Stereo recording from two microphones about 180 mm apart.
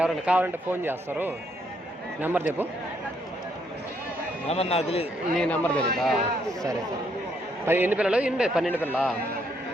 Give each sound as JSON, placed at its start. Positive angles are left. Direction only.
{"t": 0.0, "sound": "speech", "side_deg": -10}
{"t": 4.4, "sound": "a man's voice", "side_deg": 35}
{"t": 5.4, "sound": "a man's voice", "side_deg": 5}
{"t": 7.6, "sound": "speech", "side_deg": -10}
{"t": 8.7, "sound": "a man's voice", "side_deg": 10}